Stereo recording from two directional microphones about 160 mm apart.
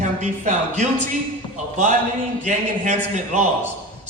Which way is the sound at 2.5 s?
50° right (ahead or behind).